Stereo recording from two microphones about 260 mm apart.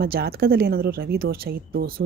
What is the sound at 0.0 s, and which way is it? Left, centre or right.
Speech, right.